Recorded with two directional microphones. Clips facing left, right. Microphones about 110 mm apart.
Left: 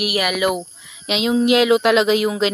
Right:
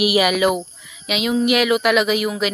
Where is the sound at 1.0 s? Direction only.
25° left (ahead or behind).